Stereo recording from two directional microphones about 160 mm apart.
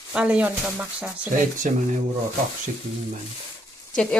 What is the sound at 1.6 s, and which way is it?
Speech, 50° right (ahead or behind).